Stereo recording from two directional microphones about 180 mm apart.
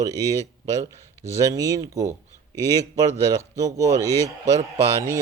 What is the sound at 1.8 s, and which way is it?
Speech, 20° right (ahead or behind).